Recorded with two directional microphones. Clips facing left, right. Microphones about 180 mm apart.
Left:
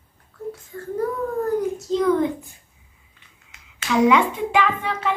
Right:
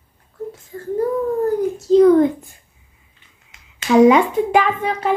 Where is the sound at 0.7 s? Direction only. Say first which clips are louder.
Right 6 dB; 35° right (ahead or behind).